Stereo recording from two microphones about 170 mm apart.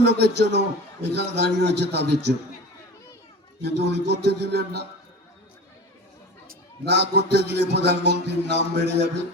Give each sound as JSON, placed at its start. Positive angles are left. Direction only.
{"t": 0.0, "sound": "a man's voice", "side_deg": -80}
{"t": 3.6, "sound": "a man's voice", "side_deg": -80}
{"t": 6.5, "sound": "a man's voice", "side_deg": -80}